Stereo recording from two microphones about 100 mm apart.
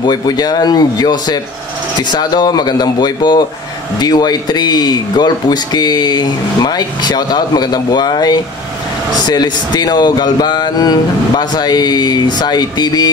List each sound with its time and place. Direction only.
0.0 s speech: 45° left (ahead or behind)